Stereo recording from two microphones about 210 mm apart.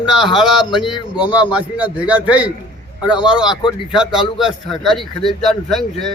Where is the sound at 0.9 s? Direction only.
20° left (ahead or behind).